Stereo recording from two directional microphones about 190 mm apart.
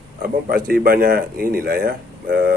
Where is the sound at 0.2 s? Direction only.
50° right (ahead or behind).